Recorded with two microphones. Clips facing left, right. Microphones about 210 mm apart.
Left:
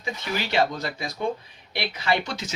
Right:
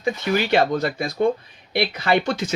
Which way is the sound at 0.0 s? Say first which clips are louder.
Right 8 dB; 55° right (ahead or behind).